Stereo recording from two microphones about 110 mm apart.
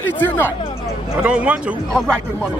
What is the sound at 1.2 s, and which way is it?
Speech, 10° right (ahead or behind).